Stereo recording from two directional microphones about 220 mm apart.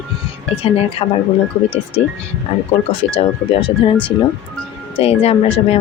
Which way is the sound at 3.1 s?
25° left (ahead or behind).